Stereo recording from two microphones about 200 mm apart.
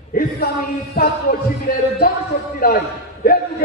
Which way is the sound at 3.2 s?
50° left (ahead or behind).